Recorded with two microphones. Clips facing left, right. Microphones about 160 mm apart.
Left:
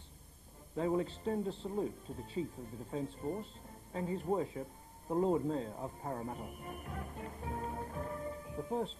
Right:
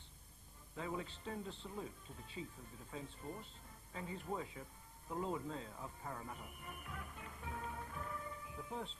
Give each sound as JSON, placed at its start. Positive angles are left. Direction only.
{"t": 0.7, "sound": "speech", "side_deg": 40}